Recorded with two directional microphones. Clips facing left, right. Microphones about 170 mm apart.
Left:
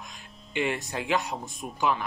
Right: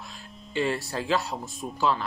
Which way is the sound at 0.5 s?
20° left (ahead or behind).